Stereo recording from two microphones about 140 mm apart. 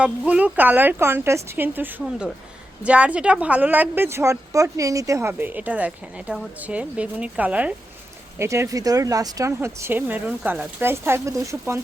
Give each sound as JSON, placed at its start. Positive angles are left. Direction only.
{"t": 0.0, "sound": "a woman's voice", "side_deg": -10}
{"t": 8.4, "sound": "speech", "side_deg": -20}